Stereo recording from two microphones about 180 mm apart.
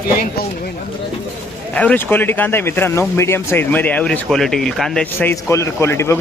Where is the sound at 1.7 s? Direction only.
5° left (ahead or behind).